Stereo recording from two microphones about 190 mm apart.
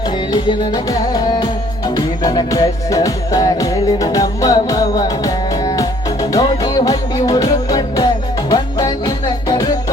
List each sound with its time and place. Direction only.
0.3 s music: 25° left (ahead or behind)